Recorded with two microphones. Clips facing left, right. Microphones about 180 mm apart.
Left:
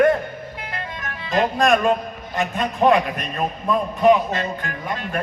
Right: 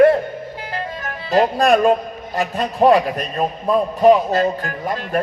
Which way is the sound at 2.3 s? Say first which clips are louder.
Right 3 dB; 35° right (ahead or behind).